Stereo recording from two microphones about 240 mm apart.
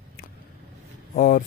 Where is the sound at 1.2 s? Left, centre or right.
Left.